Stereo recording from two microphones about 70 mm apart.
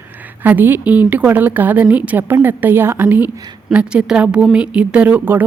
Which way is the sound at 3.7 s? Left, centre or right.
Centre.